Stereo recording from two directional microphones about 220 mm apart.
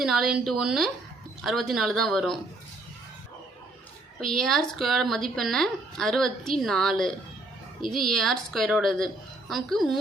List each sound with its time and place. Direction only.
0.0 s speech: centre (ahead or behind)
4.2 s speech: centre (ahead or behind)